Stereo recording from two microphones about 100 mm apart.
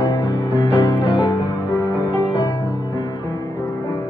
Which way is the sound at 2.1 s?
30° left (ahead or behind).